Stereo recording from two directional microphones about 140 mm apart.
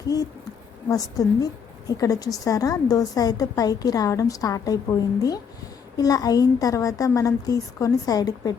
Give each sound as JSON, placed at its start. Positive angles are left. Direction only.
{"t": 0.9, "sound": "a woman's voice", "side_deg": 25}